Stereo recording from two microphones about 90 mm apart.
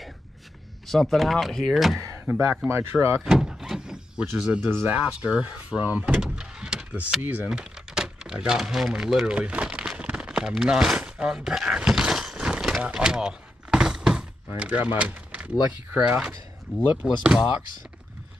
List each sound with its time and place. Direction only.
0.8 s speech: centre (ahead or behind)
2.0 s a sound: 30° right (ahead or behind)
2.7 s speech: 30° right (ahead or behind)
3.2 s door: 5° right (ahead or behind)
4.3 s speech: 5° right (ahead or behind)
4.6 s speech: 25° right (ahead or behind)
5.9 s door: 15° right (ahead or behind)
7.2 s speech: 20° right (ahead or behind)
7.4 s typing: 10° right (ahead or behind)
14.6 s speech: 15° right (ahead or behind)